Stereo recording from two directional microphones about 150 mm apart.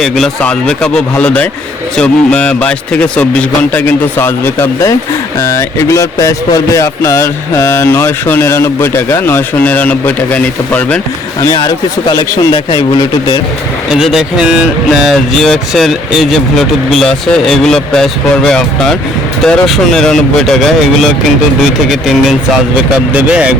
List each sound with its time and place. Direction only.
0.0 s speech: centre (ahead or behind)
11.5 s a man's voice: 30° left (ahead or behind)
13.9 s speech: 5° right (ahead or behind)